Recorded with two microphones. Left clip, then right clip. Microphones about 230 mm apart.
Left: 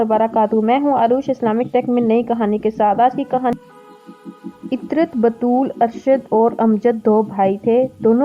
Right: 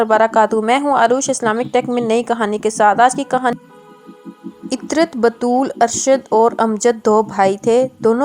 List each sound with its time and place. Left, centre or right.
0.0 s a woman's voice: right
4.9 s a woman's voice: right